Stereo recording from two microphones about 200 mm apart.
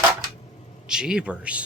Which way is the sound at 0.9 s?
5° right (ahead or behind).